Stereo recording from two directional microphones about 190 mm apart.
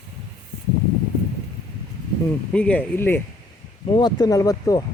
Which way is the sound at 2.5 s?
5° left (ahead or behind).